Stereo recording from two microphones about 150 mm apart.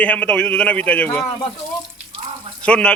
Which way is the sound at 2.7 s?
5° left (ahead or behind).